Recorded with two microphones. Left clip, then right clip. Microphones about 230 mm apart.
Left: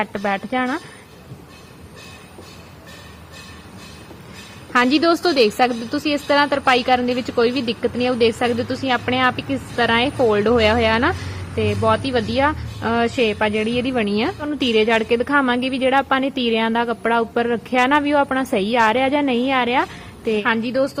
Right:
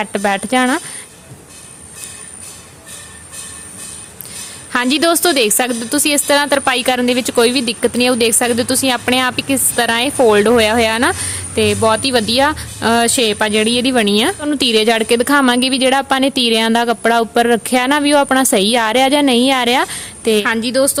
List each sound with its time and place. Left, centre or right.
0.0 s a woman's voice: right
4.7 s a woman's voice: right